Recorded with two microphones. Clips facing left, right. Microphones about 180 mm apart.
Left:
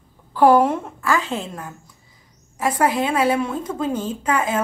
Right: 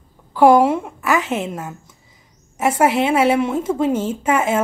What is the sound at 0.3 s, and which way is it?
A woman's voice, 10° right (ahead or behind).